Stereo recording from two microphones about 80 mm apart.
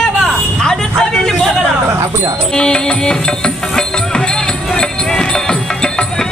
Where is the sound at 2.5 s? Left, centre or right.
Centre.